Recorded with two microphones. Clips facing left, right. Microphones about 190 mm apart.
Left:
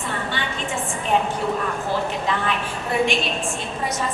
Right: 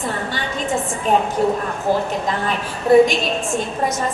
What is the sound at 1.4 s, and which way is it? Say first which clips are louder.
A woman's voice: right 5 dB; 40° right (ahead or behind).